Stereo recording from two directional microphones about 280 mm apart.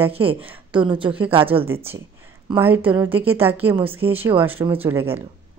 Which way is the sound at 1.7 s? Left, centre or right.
Centre.